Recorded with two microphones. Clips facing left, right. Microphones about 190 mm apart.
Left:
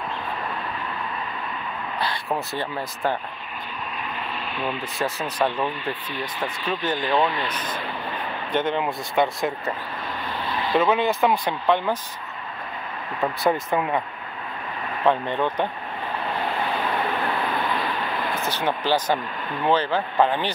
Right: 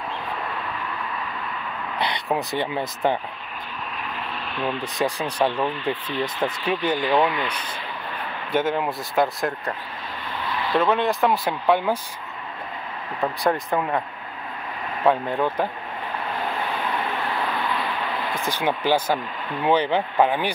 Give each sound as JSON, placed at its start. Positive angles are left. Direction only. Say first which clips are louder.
{"t": 2.0, "sound": "speech", "louder": "right 2 dB", "side_deg": -20}
{"t": 4.6, "sound": "speech", "louder": "right 2 dB", "side_deg": 5}
{"t": 4.9, "sound": "speech", "louder": "right 3 dB", "side_deg": -15}
{"t": 10.8, "sound": "speech", "louder": "even", "side_deg": 0}
{"t": 13.2, "sound": "speech", "louder": "even", "side_deg": 0}
{"t": 15.0, "sound": "speech", "louder": "right 1 dB", "side_deg": -5}
{"t": 18.4, "sound": "speech", "louder": "right 3 dB", "side_deg": -10}